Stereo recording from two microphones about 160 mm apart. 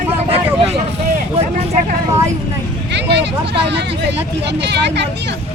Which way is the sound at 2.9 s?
90° right.